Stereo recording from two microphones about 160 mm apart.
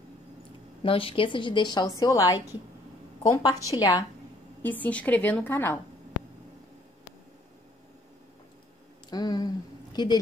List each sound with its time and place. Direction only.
0.8 s a woman's voice: 35° left (ahead or behind)
4.6 s a woman's voice: 10° left (ahead or behind)
9.1 s a woman's voice: 25° left (ahead or behind)